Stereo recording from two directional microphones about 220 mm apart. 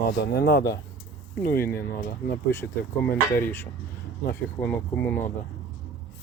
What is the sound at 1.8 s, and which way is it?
Speech, 45° left (ahead or behind).